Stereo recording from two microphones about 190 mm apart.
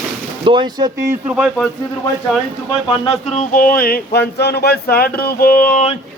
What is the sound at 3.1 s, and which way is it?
Speech, 35° left (ahead or behind).